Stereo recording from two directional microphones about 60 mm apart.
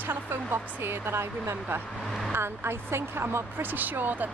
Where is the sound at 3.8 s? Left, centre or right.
Right.